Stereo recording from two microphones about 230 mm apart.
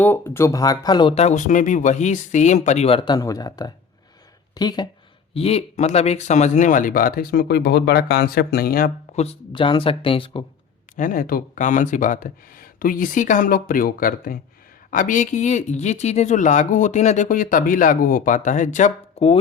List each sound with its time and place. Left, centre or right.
0.0 s speech: centre; by 9.2 s left
9.2 s speech: left
10.9 s speech: left